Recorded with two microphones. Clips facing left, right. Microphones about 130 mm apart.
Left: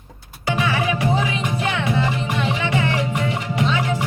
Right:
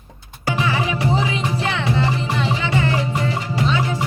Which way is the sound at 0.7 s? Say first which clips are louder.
Even; 30° right (ahead or behind).